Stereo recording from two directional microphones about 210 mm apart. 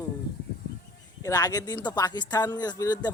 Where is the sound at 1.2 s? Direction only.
15° left (ahead or behind).